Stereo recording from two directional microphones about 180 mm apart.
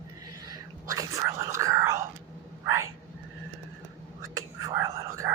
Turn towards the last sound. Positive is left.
turn(degrees=-20)  # may be behind; listen again after turning